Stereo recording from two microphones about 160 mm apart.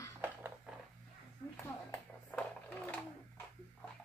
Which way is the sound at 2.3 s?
10° left (ahead or behind).